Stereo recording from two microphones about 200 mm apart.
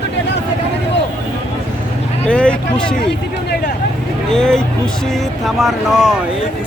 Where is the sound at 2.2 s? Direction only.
5° left (ahead or behind).